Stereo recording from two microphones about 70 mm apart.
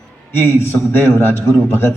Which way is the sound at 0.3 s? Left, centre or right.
Left.